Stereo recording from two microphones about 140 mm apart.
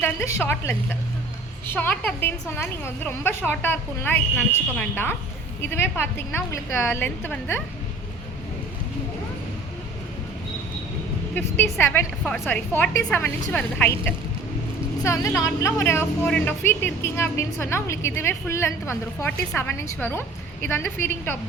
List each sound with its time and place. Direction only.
0.0 s speech: 15° left (ahead or behind)
11.3 s a woman's voice: 15° left (ahead or behind)